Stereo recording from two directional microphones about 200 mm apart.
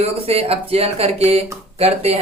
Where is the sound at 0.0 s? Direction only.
30° right (ahead or behind).